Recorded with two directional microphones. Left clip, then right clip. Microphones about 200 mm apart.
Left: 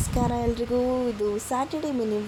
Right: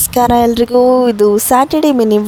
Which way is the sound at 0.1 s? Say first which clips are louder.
Right 17 dB; 45° right (ahead or behind).